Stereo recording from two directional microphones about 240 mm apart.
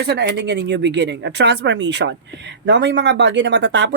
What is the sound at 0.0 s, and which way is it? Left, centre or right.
Speech, right.